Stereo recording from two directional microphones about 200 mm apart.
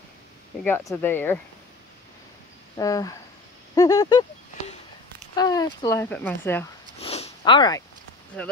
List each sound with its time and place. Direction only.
0.7 s speech: 10° left (ahead or behind)
2.8 s speech: 15° left (ahead or behind)
5.3 s speech: 20° left (ahead or behind)
7.0 s zipper: 30° left (ahead or behind)
8.4 s speech: 5° left (ahead or behind)